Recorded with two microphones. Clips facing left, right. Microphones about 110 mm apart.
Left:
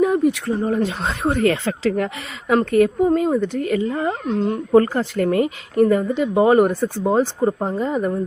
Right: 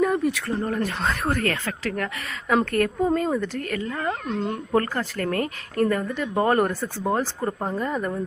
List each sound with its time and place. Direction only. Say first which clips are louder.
0.0 s speech: left 5 dB; 10° left (ahead or behind); by 2.0 s 30° left (ahead or behind)
2.6 s speech: left 6 dB; 15° left (ahead or behind)
4.3 s speech: left 6 dB; centre (ahead or behind)
4.7 s speech: left 9 dB; 20° left (ahead or behind)